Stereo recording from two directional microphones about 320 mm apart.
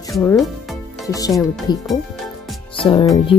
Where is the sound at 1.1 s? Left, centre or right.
Centre.